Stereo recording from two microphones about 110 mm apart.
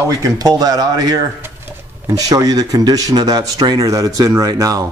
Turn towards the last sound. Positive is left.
turn(degrees=-30)  # may be behind; listen again after turning